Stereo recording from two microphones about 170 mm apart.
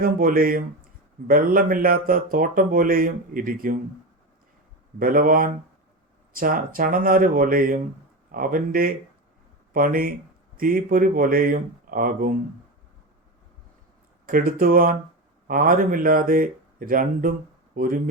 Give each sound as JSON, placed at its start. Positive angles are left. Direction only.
{"t": 0.0, "sound": "speech", "side_deg": -55}
{"t": 4.9, "sound": "speech", "side_deg": -55}
{"t": 14.3, "sound": "speech", "side_deg": -55}